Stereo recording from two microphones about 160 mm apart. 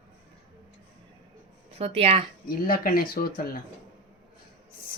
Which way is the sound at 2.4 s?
65° left (ahead or behind).